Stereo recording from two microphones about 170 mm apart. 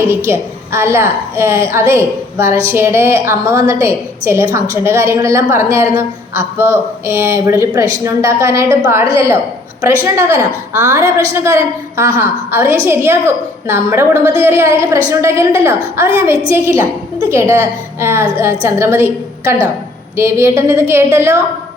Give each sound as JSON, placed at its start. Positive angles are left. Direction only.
{"t": 0.3, "sound": "a woman's voice", "side_deg": -15}